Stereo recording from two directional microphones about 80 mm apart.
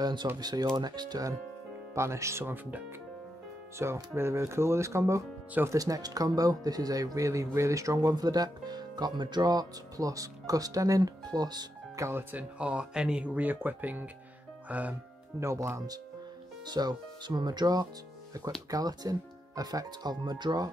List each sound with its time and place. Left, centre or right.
0.0 s speech: right
2.0 s speech: right
2.5 s speech: right
3.7 s speech: right
12.0 s speech: right
15.4 s speech: right
16.6 s speech: right